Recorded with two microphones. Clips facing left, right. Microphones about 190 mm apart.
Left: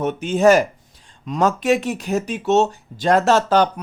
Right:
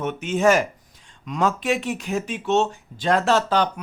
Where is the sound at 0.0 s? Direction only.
35° left (ahead or behind).